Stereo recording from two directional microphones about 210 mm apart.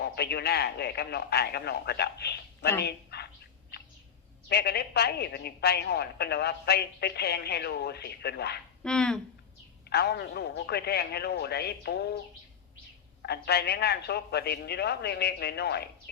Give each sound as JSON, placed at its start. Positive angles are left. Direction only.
{"t": 0.0, "sound": "a man's voice", "side_deg": 50}
{"t": 2.8, "sound": "dog", "side_deg": 50}
{"t": 4.4, "sound": "a man's voice", "side_deg": 50}
{"t": 8.8, "sound": "speech", "side_deg": 5}
{"t": 9.9, "sound": "a man's voice", "side_deg": 50}
{"t": 13.2, "sound": "a man's voice", "side_deg": 50}